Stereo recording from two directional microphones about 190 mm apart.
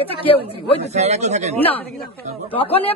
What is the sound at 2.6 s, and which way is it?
Speech, 30° left (ahead or behind).